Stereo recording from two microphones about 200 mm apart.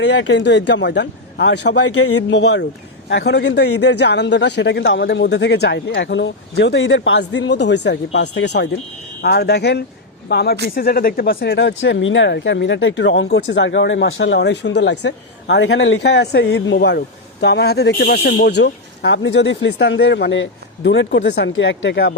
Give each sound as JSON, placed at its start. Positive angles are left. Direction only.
{"t": 0.0, "sound": "a man's voice", "side_deg": 60}